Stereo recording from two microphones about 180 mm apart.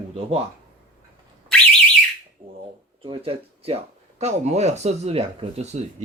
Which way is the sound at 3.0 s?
30° right (ahead or behind).